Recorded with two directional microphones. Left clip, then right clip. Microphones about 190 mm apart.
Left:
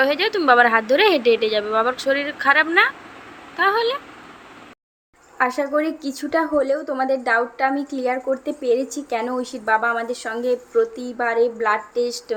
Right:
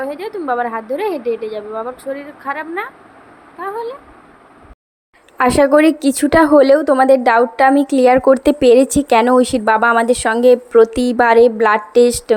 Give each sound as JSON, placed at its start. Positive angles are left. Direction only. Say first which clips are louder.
{"t": 0.0, "sound": "a woman's voice", "louder": "left 5 dB", "side_deg": -5}
{"t": 5.4, "sound": "a woman's voice", "louder": "right 10 dB", "side_deg": -50}